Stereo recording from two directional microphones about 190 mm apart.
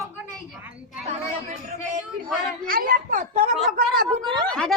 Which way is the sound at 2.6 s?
50° right (ahead or behind).